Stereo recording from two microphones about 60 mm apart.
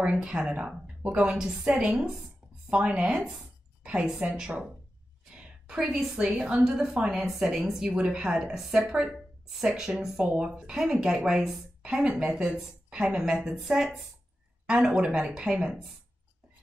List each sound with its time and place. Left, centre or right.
0.0 s a woman's voice: centre
1.7 s a woman's voice: right
5.3 s a sound: centre
5.8 s a woman's voice: centre
9.1 s a sound: centre
10.1 s a woman's voice: centre
13.6 s speech: centre
14.7 s a woman's voice: centre